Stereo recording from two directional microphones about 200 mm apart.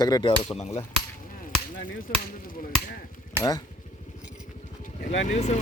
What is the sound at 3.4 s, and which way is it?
Speech, 15° left (ahead or behind).